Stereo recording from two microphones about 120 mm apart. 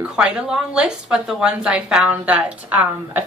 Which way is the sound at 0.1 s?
5° right (ahead or behind).